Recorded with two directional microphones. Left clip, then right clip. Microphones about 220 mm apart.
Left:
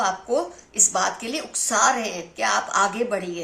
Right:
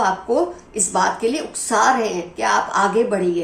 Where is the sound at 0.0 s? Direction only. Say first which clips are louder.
Right 5 dB; 45° left (ahead or behind).